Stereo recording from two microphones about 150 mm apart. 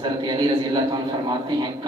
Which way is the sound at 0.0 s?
30° right (ahead or behind).